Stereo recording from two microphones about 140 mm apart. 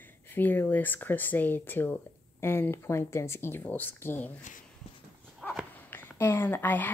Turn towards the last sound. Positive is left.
turn(degrees=15)  # may be behind; listen again after turning